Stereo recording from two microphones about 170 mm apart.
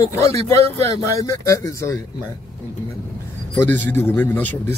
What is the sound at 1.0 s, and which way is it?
Speech, 20° left (ahead or behind).